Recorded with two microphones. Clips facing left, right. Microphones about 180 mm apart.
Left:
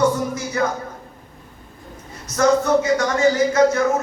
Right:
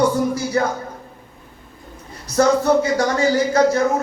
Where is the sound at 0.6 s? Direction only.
35° right (ahead or behind).